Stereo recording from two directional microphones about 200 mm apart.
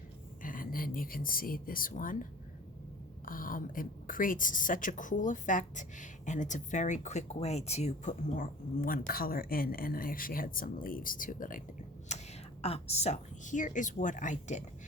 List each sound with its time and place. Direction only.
0.4 s a woman's voice: 45° left (ahead or behind)
3.2 s a woman's voice: 45° left (ahead or behind)
12.1 s a sound: 35° left (ahead or behind)
12.6 s speech: 30° left (ahead or behind)